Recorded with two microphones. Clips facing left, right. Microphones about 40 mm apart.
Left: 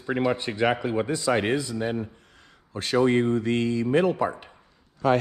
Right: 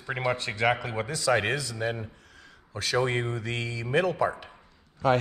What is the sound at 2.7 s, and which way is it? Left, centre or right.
Speech, left.